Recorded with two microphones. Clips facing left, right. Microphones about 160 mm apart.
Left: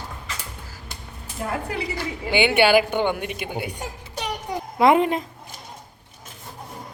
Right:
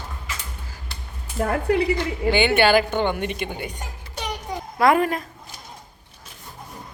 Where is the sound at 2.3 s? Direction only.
15° left (ahead or behind).